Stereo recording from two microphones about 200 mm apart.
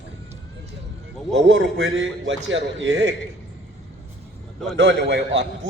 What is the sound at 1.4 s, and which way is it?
A man's voice, 65° right (ahead or behind).